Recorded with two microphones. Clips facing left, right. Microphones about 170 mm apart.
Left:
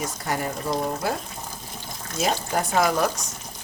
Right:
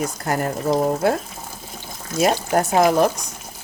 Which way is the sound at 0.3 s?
55° right (ahead or behind).